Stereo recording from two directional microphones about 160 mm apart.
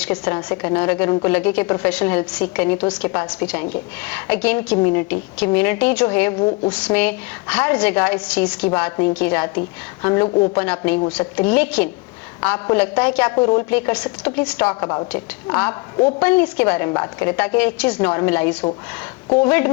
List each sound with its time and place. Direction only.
0.1 s a woman's voice: 20° left (ahead or behind)
10.2 s a woman's voice: 30° left (ahead or behind)
10.5 s a woman's voice: 10° left (ahead or behind)
13.3 s a woman's voice: 20° left (ahead or behind)